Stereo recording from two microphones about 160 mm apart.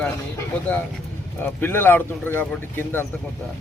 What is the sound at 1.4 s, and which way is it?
Speech, 15° left (ahead or behind).